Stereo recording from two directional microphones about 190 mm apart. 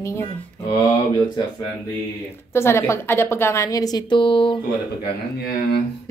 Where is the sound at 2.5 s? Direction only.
15° left (ahead or behind).